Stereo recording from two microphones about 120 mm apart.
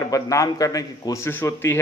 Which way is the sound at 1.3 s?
15° left (ahead or behind).